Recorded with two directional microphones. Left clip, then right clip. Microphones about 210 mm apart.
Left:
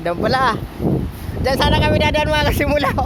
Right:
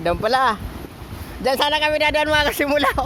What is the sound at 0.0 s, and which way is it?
Speech, 10° right (ahead or behind).